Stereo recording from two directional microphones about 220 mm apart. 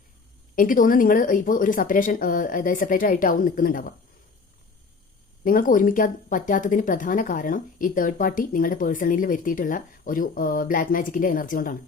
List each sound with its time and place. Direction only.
0.5 s speech: 40° left (ahead or behind)
5.5 s speech: 40° left (ahead or behind)